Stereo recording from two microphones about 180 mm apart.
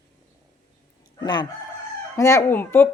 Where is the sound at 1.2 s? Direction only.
25° left (ahead or behind).